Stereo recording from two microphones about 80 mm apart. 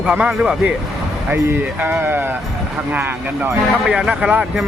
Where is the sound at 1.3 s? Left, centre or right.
Right.